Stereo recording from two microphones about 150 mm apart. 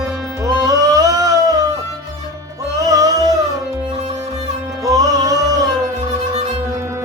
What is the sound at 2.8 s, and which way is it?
Music, 25° right (ahead or behind).